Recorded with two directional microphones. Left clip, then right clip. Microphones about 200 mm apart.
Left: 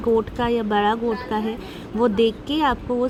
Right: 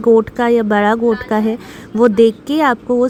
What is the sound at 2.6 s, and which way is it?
Speech, 35° right (ahead or behind).